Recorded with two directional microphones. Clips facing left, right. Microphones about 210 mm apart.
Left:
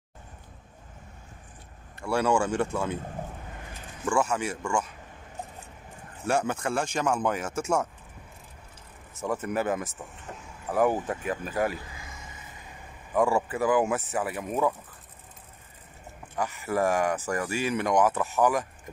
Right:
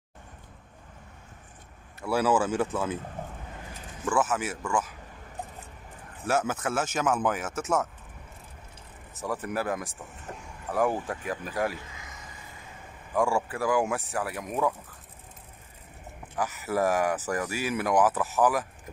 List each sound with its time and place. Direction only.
2.0 s speech: 5° right (ahead or behind)
4.1 s speech: 5° right (ahead or behind)
6.2 s speech: 5° right (ahead or behind)
9.2 s speech: centre (ahead or behind)
11.9 s vehicle: 30° left (ahead or behind)
13.1 s speech: centre (ahead or behind)
16.3 s speech: 5° right (ahead or behind)